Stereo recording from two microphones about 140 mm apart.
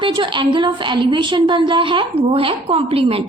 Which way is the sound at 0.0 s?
35° right (ahead or behind).